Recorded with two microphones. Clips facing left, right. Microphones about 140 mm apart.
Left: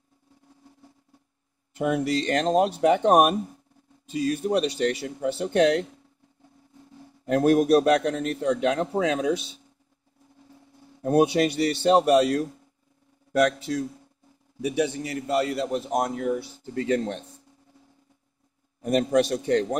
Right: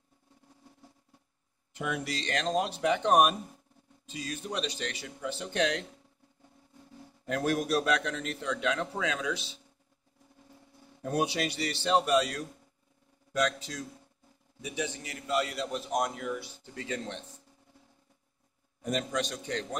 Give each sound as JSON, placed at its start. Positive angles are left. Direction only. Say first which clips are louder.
{"t": 1.8, "sound": "a man's voice", "louder": "left 10 dB", "side_deg": 45}
{"t": 7.2, "sound": "a man's voice", "louder": "left 10 dB", "side_deg": 45}
{"t": 11.0, "sound": "a man's voice", "louder": "left 10 dB", "side_deg": 50}
{"t": 18.8, "sound": "a man's voice", "louder": "left 10 dB", "side_deg": 50}